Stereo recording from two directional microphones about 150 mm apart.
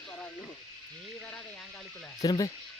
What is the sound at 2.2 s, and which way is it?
Speech, 25° left (ahead or behind).